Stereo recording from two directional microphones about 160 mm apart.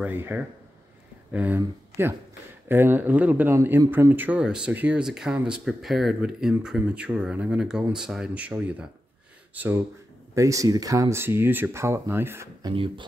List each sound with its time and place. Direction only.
0.0 s speech: 10° right (ahead or behind)
2.7 s speech: 15° right (ahead or behind)
12.6 s speech: 30° right (ahead or behind)